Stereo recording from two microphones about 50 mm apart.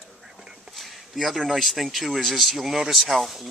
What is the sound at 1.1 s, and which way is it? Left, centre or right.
Speech, centre.